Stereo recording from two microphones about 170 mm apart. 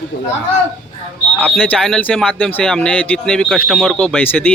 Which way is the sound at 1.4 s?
10° left (ahead or behind).